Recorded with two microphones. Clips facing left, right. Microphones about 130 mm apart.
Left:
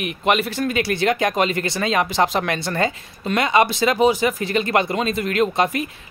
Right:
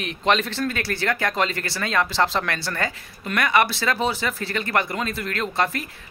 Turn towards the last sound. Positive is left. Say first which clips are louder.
# left 6 dB
turn(degrees=20)  # may be behind; listen again after turning